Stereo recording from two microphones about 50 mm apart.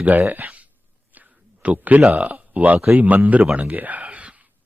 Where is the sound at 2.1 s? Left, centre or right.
Right.